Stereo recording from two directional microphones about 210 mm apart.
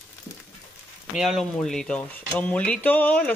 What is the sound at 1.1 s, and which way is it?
Speech, centre (ahead or behind).